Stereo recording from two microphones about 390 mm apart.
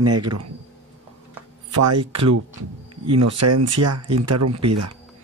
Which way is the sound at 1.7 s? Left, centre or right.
Right.